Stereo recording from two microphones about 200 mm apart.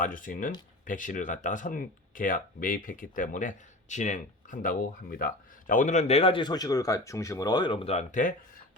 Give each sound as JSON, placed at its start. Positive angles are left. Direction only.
{"t": 0.0, "sound": "speech", "side_deg": 40}